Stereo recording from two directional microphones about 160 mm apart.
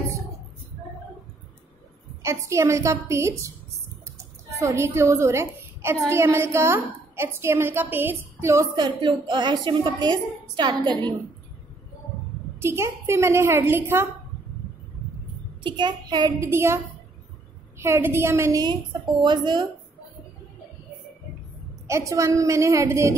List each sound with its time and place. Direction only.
2.2 s a woman's voice: 20° right (ahead or behind)
12.5 s a woman's voice: 15° right (ahead or behind)
15.6 s a woman's voice: 30° right (ahead or behind)
21.8 s a woman's voice: 20° right (ahead or behind)